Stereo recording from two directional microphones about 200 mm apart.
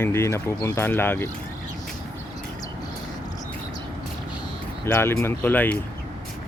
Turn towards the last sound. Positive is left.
turn(degrees=10)  # may be behind; listen again after turning